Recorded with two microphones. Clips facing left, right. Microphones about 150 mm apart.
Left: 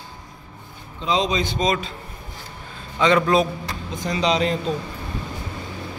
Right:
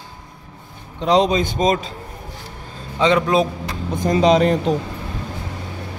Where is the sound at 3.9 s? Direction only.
50° right (ahead or behind).